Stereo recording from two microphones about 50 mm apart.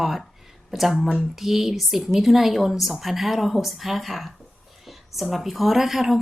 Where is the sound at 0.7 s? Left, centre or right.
Centre.